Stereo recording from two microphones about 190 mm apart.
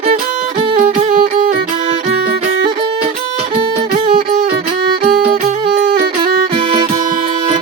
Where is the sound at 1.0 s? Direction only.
50° right (ahead or behind).